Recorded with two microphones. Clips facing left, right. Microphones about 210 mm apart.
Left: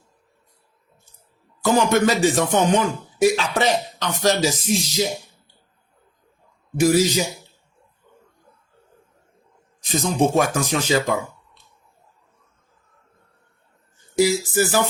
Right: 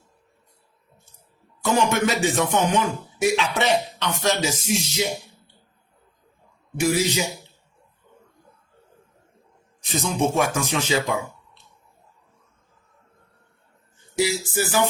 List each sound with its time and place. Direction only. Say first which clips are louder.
1.6 s speech: left 3 dB; 35° left (ahead or behind)
6.7 s speech: left 5 dB; 40° left (ahead or behind)
9.9 s speech: left 4 dB; 40° left (ahead or behind)
14.2 s speech: left 5 dB; 40° left (ahead or behind)